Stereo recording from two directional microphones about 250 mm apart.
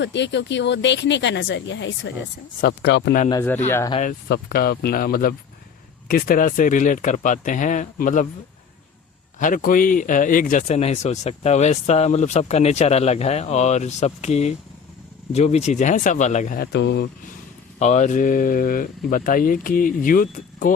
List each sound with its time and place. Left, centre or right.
0.0 s speech: left
3.2 s speech: centre
4.3 s speech: left
9.4 s speech: left
17.7 s speech: left